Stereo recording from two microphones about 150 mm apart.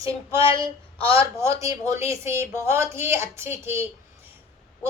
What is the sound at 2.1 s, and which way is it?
A woman's voice, 20° right (ahead or behind).